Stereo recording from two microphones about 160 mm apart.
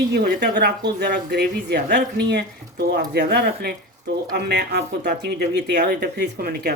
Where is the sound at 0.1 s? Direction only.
85° right.